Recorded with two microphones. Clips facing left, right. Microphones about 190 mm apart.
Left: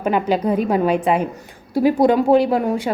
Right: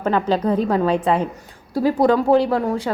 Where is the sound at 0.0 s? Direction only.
15° left (ahead or behind).